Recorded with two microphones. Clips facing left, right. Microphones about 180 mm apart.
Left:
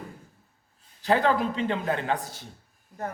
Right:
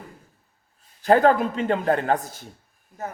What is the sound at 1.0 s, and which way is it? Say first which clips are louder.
A man's voice: right 6 dB; 50° right (ahead or behind).